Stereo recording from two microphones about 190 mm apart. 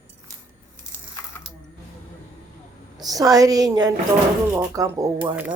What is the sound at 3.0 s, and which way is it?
A woman's voice, 20° right (ahead or behind).